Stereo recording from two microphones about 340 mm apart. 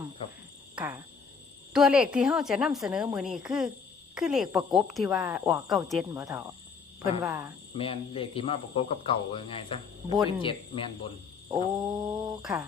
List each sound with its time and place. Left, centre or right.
0.8 s speech: centre
7.8 s speech: centre
11.8 s speech: centre